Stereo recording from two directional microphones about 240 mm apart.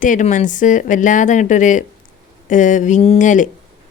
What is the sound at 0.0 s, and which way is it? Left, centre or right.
Speech, left.